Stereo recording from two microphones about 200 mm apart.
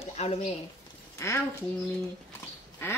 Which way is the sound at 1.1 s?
15° left (ahead or behind).